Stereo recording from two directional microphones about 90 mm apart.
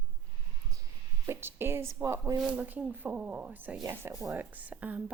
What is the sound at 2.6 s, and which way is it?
A woman's voice, 20° right (ahead or behind).